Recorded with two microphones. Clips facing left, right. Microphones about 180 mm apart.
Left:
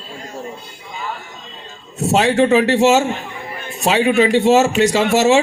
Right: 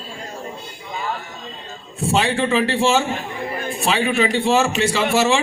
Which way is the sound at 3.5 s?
45° right (ahead or behind).